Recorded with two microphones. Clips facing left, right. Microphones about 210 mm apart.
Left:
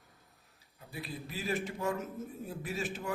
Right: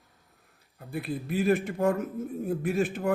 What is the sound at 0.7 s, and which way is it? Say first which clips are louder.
A man's voice: right 10 dB; 55° right (ahead or behind).